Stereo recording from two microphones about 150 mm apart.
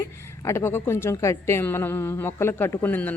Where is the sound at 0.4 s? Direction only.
15° left (ahead or behind).